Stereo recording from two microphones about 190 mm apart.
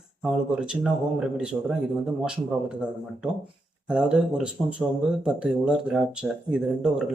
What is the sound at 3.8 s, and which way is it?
Speech, 5° right (ahead or behind).